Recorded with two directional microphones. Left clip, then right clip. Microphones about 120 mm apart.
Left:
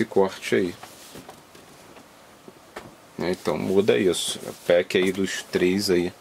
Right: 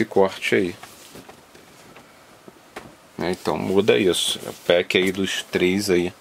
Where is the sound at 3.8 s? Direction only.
15° right (ahead or behind).